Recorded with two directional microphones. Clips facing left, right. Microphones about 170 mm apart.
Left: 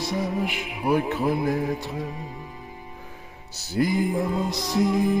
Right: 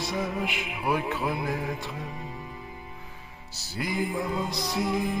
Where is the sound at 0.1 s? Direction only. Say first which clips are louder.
Left 4 dB; 40° left (ahead or behind).